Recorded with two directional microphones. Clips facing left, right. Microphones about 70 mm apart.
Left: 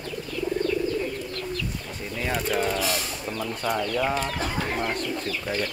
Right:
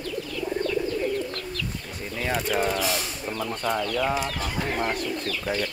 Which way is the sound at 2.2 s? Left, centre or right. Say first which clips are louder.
Right 1 dB; centre.